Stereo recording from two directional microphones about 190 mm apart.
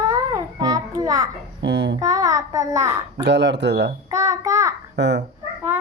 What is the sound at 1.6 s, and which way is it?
Speech, 70° right (ahead or behind).